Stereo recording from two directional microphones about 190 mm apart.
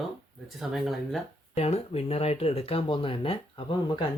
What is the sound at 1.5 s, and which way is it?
Speech, 30° left (ahead or behind).